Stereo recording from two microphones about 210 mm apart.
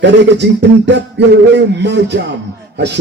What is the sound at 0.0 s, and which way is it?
A man's voice, 55° right (ahead or behind).